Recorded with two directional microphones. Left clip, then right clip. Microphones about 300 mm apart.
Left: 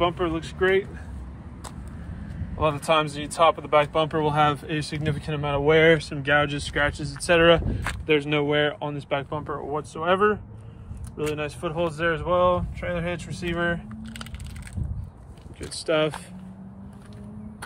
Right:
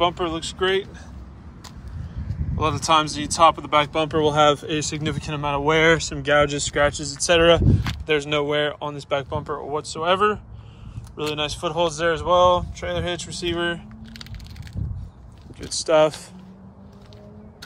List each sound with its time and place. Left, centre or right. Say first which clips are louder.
0.0 s speech: right 2 dB; centre
2.5 s speech: right 3 dB; centre
15.8 s speech: right 6 dB; centre